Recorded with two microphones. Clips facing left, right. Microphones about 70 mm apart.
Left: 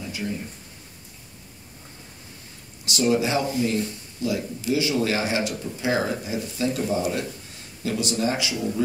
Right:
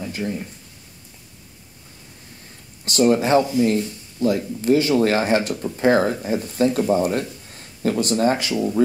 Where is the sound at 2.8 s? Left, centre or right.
Right.